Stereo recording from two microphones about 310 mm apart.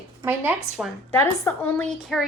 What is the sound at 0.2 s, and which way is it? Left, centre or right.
Speech, centre.